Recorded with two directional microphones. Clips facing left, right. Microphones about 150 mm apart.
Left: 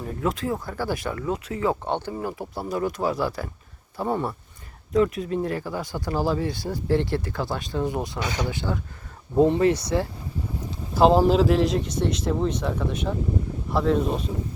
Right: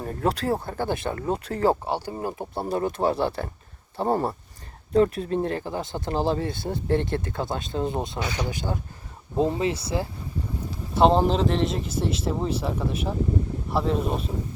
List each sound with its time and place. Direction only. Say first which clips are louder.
0.0 s speech: right 1 dB; 45° right (ahead or behind); by 1.2 s 25° right (ahead or behind)
1.2 s speech: right 4 dB; 35° right (ahead or behind)
1.8 s speech: left 1 dB; 10° right (ahead or behind)
2.1 s speech: right 1 dB; 25° right (ahead or behind)
9.6 s speech: left 5 dB; 25° right (ahead or behind)
10.9 s speech: left 2 dB; 5° left (ahead or behind)